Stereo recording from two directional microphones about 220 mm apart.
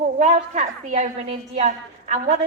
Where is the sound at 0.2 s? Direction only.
30° right (ahead or behind).